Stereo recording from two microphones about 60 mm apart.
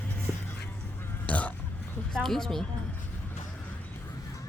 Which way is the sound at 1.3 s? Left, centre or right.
Left.